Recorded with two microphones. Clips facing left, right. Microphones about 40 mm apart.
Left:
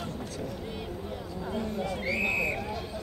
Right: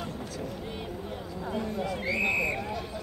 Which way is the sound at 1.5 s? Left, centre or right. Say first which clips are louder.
Right 1 dB; centre.